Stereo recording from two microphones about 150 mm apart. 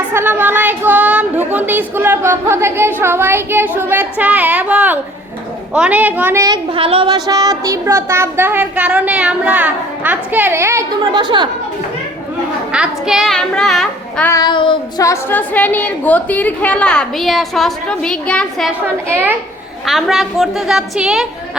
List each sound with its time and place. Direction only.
0.1 s a woman's voice: 15° right (ahead or behind)
6.7 s speech: 40° right (ahead or behind)
12.7 s a child's voice: 5° right (ahead or behind)
14.3 s child singing: 25° left (ahead or behind)
15.0 s a woman's voice: 15° left (ahead or behind); by 21.2 s centre (ahead or behind)